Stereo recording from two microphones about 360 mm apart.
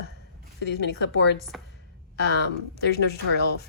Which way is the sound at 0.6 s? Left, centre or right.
Left.